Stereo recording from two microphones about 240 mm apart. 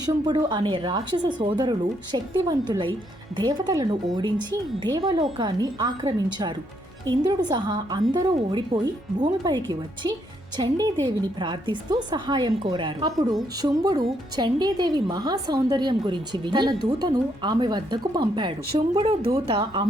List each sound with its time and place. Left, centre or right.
0.0 s a woman's voice: centre